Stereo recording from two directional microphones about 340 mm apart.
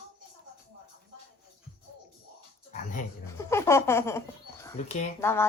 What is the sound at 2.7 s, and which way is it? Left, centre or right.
Speech, left.